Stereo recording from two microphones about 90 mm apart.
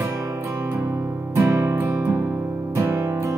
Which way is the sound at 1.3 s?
30° right (ahead or behind).